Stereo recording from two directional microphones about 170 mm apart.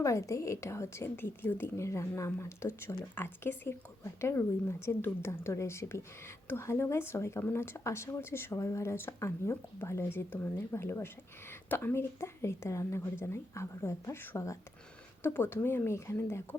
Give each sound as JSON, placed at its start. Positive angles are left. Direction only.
{"t": 0.0, "sound": "speech", "side_deg": 15}